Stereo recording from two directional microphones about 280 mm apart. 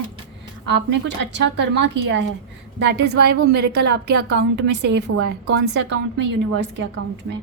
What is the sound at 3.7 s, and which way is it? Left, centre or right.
Speech, right.